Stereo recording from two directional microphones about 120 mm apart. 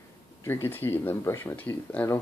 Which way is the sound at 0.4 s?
20° left (ahead or behind).